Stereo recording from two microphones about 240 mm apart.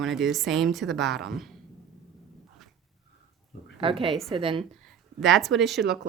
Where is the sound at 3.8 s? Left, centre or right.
Right.